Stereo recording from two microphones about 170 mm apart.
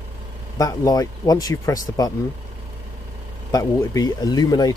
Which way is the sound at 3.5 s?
20° left (ahead or behind).